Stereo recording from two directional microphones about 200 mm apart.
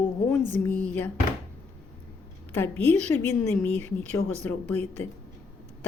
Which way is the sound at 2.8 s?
30° right (ahead or behind).